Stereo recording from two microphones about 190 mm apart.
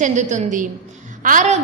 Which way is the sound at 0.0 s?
40° right (ahead or behind).